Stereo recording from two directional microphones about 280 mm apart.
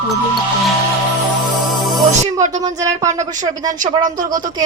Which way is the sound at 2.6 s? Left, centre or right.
Centre.